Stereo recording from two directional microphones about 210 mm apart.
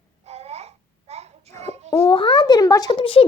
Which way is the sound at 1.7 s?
30° right (ahead or behind).